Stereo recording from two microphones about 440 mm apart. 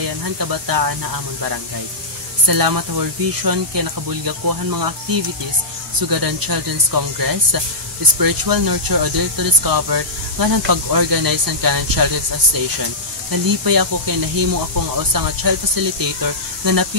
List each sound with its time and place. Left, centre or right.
0.0 s speech: right
13.3 s speech: right